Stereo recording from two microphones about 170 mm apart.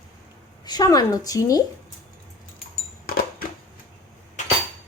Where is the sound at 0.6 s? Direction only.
25° left (ahead or behind).